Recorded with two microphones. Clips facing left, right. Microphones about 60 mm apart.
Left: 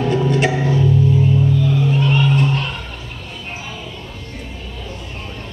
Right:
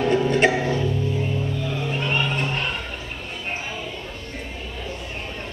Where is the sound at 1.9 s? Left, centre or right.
Centre.